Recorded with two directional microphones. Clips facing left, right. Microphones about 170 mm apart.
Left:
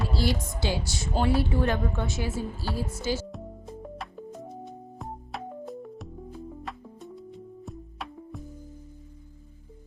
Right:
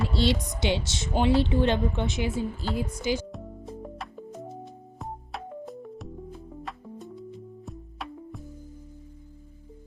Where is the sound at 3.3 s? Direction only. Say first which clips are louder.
Right 1 dB; centre (ahead or behind).